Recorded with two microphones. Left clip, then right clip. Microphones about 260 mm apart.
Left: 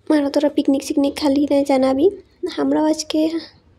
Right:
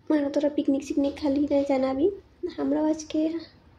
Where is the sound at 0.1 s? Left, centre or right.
Left.